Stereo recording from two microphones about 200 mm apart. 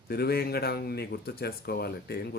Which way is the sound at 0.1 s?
50° left (ahead or behind).